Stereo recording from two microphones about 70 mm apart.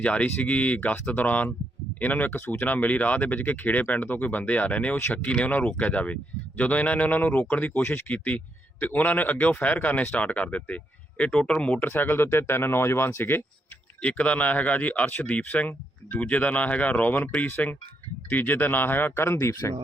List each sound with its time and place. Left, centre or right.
0.0 s speech: centre
7.8 s speech: left
8.0 s speech: left
11.9 s speech: left
14.0 s speech: centre; by 19.7 s left